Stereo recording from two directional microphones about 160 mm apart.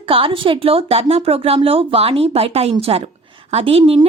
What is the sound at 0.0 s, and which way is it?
A woman's voice, 35° right (ahead or behind).